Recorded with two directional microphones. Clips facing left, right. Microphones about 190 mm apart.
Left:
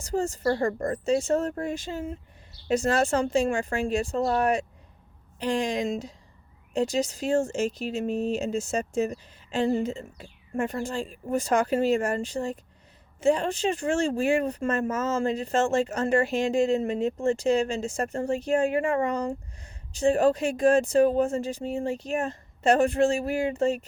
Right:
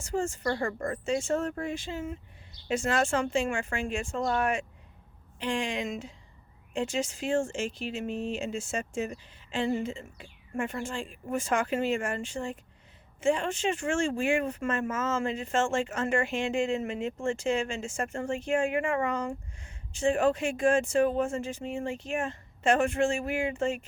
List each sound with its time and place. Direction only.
0.0 s speech: 40° left (ahead or behind)